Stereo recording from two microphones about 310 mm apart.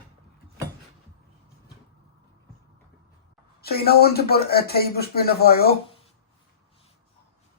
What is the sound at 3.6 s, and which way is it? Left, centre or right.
Speech, left.